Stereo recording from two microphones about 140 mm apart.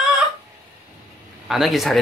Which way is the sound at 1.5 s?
Centre (ahead or behind).